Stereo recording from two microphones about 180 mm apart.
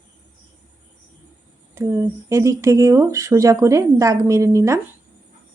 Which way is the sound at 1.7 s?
15° right (ahead or behind).